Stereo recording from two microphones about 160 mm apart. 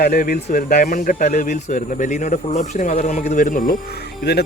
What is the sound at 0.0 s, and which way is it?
Speech, 80° left.